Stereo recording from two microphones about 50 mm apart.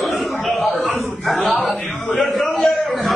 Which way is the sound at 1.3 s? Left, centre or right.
Left.